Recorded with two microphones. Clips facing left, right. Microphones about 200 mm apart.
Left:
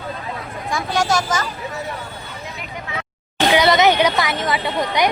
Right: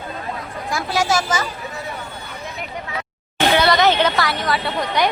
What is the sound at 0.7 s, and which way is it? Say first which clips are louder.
Speech: even; 5° right (ahead or behind).